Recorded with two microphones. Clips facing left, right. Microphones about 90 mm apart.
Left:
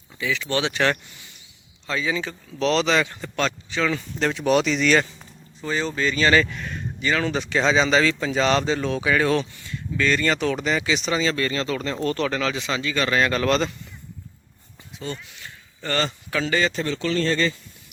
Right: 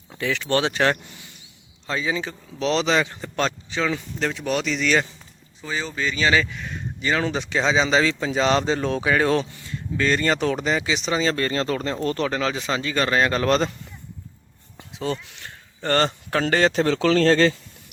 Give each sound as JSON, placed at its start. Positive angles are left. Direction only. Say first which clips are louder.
{"t": 0.2, "sound": "speech", "louder": "right 2 dB", "side_deg": -55}
{"t": 4.2, "sound": "speech", "louder": "left 5 dB", "side_deg": 0}
{"t": 7.0, "sound": "speech", "louder": "even", "side_deg": -25}
{"t": 8.6, "sound": "speech", "louder": "right 1 dB", "side_deg": -35}
{"t": 11.2, "sound": "speech", "louder": "right 1 dB", "side_deg": -35}
{"t": 14.8, "sound": "speech", "louder": "right 5 dB", "side_deg": -85}